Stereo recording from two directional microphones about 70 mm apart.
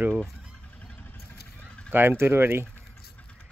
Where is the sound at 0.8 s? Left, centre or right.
Left.